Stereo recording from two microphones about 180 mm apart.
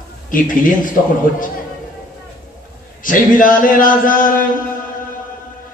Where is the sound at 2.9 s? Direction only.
50° left (ahead or behind).